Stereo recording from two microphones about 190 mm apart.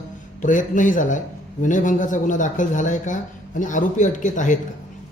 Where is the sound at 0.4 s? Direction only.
40° left (ahead or behind).